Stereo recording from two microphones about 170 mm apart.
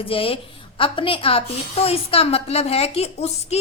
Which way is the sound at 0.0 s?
30° left (ahead or behind).